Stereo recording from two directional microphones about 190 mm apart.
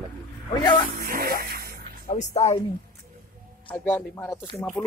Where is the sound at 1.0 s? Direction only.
50° right (ahead or behind).